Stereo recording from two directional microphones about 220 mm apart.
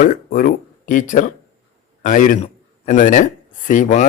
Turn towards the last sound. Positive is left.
turn(degrees=35)  # may be behind; listen again after turning